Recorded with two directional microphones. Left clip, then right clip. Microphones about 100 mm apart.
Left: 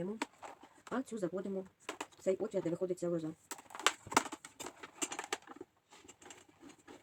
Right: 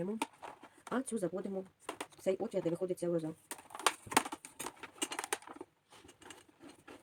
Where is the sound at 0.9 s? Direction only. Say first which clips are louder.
Right 2 dB; 40° right (ahead or behind).